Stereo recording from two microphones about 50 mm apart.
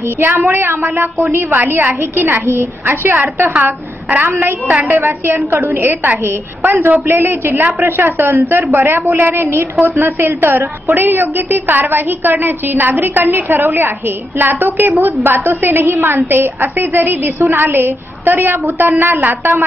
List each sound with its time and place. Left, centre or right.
0.2 s a woman's voice: right
4.2 s a woman's voice: right
9.1 s a woman's voice: right